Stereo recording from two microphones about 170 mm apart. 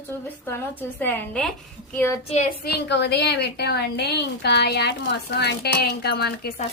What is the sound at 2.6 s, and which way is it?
A woman's voice, 90° left.